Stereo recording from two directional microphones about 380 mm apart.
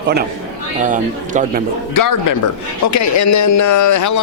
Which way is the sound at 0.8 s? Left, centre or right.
Centre.